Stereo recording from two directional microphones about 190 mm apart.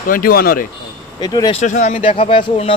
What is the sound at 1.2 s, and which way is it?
Speech, 20° left (ahead or behind).